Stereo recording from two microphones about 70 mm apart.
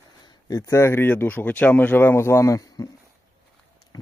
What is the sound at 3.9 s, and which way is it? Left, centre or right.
Speech, left.